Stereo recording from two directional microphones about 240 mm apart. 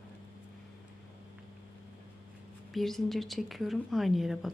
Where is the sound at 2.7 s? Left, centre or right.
Centre.